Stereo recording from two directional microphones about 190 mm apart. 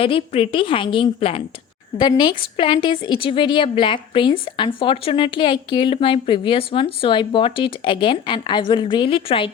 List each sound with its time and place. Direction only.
0.0 s a woman's voice: 30° left (ahead or behind)